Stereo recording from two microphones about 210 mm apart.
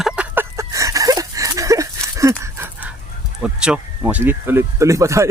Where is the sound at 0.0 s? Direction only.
10° right (ahead or behind).